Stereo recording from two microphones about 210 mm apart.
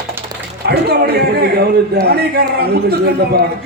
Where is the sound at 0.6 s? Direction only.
50° right (ahead or behind).